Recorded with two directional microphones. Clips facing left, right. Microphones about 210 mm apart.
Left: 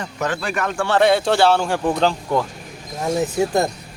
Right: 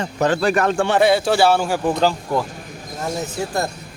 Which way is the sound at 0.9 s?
5° right (ahead or behind).